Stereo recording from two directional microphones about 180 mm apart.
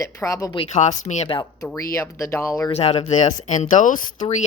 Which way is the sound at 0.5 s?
35° left (ahead or behind).